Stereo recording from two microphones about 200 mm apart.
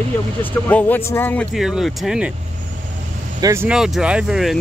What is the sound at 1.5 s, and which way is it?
Speech, centre (ahead or behind).